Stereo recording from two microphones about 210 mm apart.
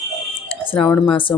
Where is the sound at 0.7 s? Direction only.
25° left (ahead or behind).